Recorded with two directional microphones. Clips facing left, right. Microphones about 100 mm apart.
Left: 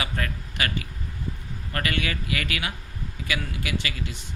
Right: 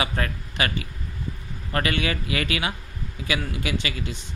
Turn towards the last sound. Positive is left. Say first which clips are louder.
# right 2 dB
turn(degrees=-25)  # may be behind; listen again after turning